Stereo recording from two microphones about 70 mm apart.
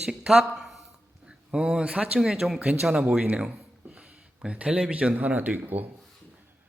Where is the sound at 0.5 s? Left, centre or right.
Centre.